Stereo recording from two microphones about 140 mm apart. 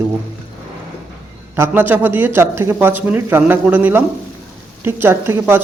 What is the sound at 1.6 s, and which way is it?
Speech, 15° right (ahead or behind).